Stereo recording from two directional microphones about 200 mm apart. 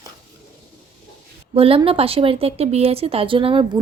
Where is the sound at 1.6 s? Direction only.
30° right (ahead or behind).